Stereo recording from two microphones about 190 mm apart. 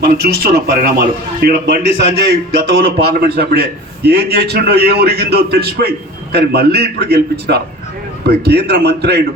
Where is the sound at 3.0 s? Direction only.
55° right (ahead or behind).